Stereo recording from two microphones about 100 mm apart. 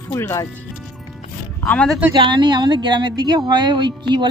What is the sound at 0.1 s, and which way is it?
Speech, 30° left (ahead or behind).